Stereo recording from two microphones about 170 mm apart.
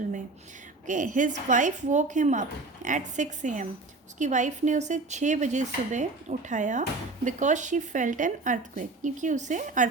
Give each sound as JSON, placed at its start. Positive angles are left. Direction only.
{"t": 0.9, "sound": "speech", "side_deg": -50}